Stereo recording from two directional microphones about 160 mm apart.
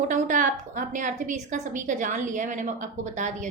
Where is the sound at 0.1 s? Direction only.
55° right (ahead or behind).